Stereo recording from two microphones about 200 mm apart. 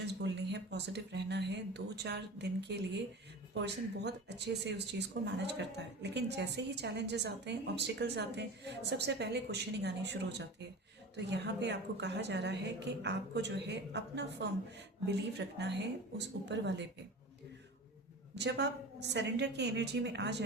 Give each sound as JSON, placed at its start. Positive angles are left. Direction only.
{"t": 0.0, "sound": "speech", "side_deg": -60}
{"t": 18.3, "sound": "speech", "side_deg": -60}